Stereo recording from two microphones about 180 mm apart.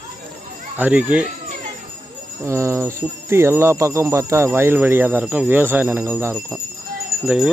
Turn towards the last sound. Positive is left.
turn(degrees=-5)  # may be behind; listen again after turning